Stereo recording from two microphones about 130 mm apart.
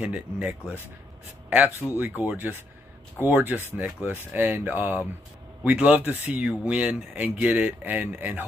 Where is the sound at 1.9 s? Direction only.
15° right (ahead or behind).